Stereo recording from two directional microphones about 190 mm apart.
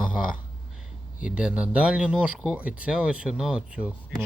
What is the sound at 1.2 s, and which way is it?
Speech, 5° right (ahead or behind).